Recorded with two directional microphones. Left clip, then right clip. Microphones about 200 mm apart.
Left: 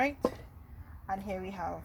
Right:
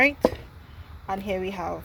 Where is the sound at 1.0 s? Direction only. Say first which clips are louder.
Right 8 dB; 25° right (ahead or behind).